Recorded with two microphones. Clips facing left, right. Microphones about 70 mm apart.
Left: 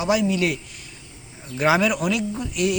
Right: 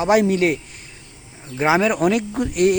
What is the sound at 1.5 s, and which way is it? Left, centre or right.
Speech, right.